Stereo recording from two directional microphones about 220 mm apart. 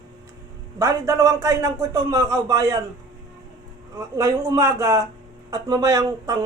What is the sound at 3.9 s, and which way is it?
A man's voice, 15° right (ahead or behind).